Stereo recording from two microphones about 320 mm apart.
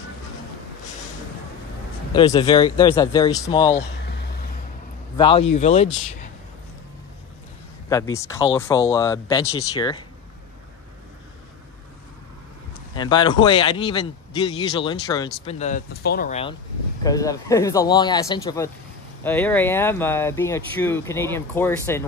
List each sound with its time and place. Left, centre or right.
2.1 s speech: centre
4.0 s a sound: left
5.1 s speech: centre
7.9 s speech: centre
12.9 s speech: centre